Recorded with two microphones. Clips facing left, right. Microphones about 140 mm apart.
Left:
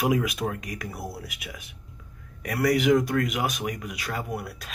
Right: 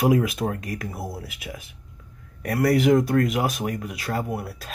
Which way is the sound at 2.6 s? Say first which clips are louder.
Right 2 dB; 35° right (ahead or behind).